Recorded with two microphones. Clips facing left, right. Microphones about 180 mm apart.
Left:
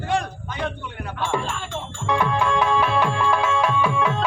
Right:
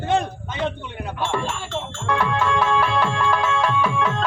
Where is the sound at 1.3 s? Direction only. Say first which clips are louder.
Right 1 dB; 10° left (ahead or behind).